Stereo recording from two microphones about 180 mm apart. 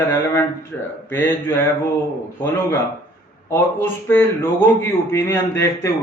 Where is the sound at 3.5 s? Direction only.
10° left (ahead or behind).